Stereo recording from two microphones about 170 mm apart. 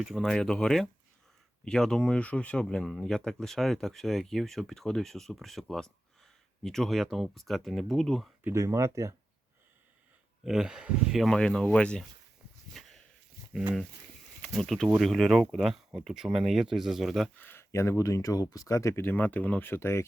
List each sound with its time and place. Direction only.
0.0 s speech: centre (ahead or behind)
8.4 s speech: 20° right (ahead or behind)
10.4 s speech: 5° right (ahead or behind)
12.8 s walk: centre (ahead or behind)
14.4 s speech: centre (ahead or behind)